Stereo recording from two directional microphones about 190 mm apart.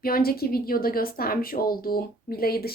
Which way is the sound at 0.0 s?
50° left (ahead or behind).